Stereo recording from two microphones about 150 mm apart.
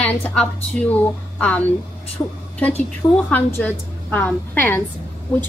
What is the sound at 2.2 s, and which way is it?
A woman's voice, 20° left (ahead or behind).